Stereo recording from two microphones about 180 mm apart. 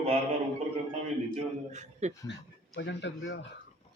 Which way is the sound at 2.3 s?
85° left.